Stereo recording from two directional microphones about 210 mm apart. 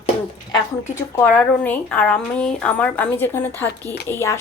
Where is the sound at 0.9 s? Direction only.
10° left (ahead or behind).